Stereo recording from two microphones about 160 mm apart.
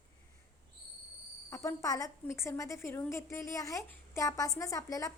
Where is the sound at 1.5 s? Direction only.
20° left (ahead or behind).